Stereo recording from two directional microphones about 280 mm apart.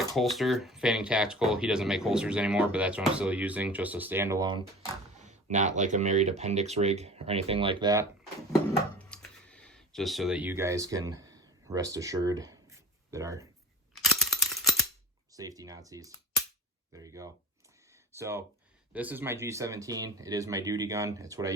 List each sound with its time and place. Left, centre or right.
0.1 s speech: centre
5.2 s speech: right
9.0 s a sound: centre
13.1 s speech: centre
13.9 s a sound: centre
15.3 s cap gun: centre
17.0 s speech: centre